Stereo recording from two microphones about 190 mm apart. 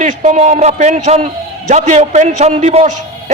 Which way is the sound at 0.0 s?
40° right (ahead or behind).